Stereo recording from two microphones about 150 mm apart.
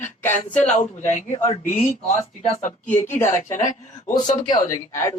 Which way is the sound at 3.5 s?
55° left (ahead or behind).